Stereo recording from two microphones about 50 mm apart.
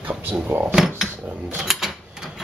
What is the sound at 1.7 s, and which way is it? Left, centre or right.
Typewriter, centre.